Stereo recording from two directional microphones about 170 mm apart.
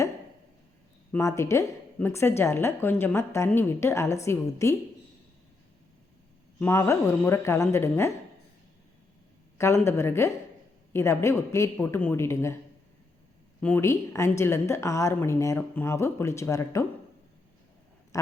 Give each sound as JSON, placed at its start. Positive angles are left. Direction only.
{"t": 1.1, "sound": "speech", "side_deg": 15}
{"t": 6.6, "sound": "speech", "side_deg": 15}
{"t": 9.6, "sound": "speech", "side_deg": 15}
{"t": 13.6, "sound": "speech", "side_deg": 10}
{"t": 18.1, "sound": "a sound", "side_deg": 20}